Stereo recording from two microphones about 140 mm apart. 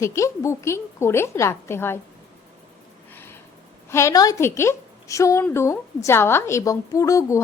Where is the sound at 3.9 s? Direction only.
20° left (ahead or behind).